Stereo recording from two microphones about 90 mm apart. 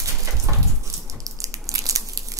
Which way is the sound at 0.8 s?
40° right (ahead or behind).